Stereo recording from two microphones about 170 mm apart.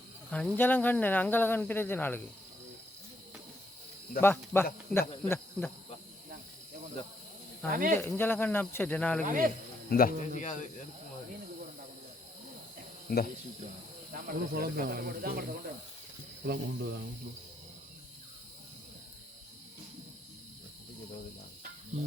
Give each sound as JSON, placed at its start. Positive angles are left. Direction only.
{"t": 0.3, "sound": "speech", "side_deg": 10}
{"t": 4.2, "sound": "speech", "side_deg": 15}
{"t": 7.7, "sound": "speech", "side_deg": -55}
{"t": 8.0, "sound": "speech", "side_deg": 15}
{"t": 9.2, "sound": "speech", "side_deg": -55}
{"t": 9.9, "sound": "speech", "side_deg": 55}
{"t": 13.1, "sound": "speech", "side_deg": 65}
{"t": 14.1, "sound": "speech", "side_deg": -65}